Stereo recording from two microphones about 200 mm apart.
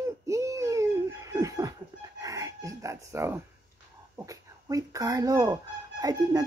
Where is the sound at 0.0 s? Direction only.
15° right (ahead or behind).